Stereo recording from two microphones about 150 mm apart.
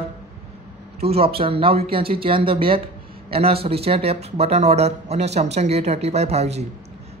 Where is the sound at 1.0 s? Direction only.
40° right (ahead or behind).